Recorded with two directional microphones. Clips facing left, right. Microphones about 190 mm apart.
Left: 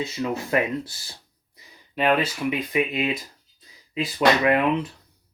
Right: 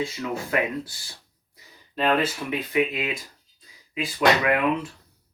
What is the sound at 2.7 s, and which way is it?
Speech, 20° left (ahead or behind).